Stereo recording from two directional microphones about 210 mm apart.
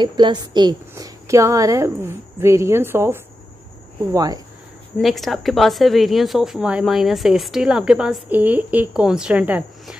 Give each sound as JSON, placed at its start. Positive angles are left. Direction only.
{"t": 0.0, "sound": "a woman's voice", "side_deg": -20}
{"t": 4.9, "sound": "a woman's voice", "side_deg": 0}